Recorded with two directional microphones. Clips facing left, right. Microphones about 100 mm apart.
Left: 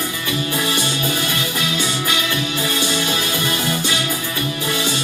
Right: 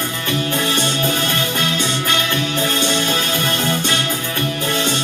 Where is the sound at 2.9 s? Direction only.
50° right (ahead or behind).